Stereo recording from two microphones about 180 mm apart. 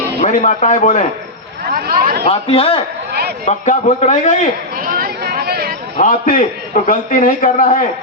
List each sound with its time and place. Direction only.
0.2 s a man's voice: 45° left (ahead or behind)
1.7 s speech: 55° right (ahead or behind)
2.3 s a man's voice: 30° left (ahead or behind)
4.8 s a sound: 55° right (ahead or behind)
6.0 s a man's voice: 45° left (ahead or behind)